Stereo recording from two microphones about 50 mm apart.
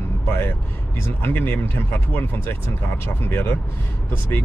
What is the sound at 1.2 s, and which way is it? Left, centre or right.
Speech, left.